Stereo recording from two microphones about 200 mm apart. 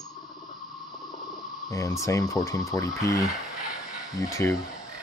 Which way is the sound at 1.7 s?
15° left (ahead or behind).